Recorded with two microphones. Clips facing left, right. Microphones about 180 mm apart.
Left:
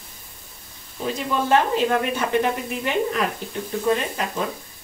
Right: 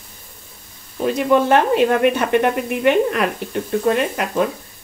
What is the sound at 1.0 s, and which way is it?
Speech, 65° right (ahead or behind).